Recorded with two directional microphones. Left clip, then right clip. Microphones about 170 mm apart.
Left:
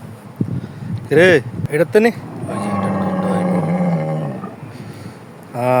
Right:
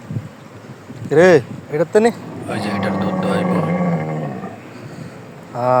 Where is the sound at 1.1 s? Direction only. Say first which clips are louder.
Even; 35° left (ahead or behind).